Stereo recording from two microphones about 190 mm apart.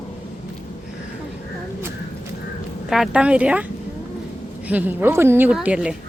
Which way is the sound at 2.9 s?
5° right (ahead or behind).